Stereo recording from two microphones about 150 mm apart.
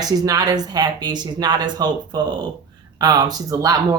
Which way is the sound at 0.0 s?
25° right (ahead or behind).